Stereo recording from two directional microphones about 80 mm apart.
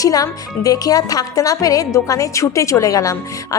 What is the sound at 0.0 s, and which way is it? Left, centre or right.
A woman's voice, left.